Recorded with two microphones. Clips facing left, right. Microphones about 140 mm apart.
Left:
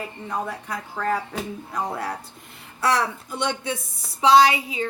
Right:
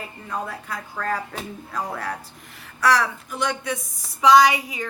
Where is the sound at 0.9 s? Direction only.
15° left (ahead or behind).